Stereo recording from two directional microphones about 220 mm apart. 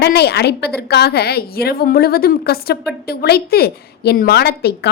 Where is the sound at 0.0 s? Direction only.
45° left (ahead or behind).